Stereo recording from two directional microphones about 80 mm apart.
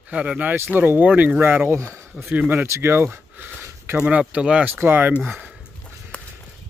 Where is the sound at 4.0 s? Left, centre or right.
Centre.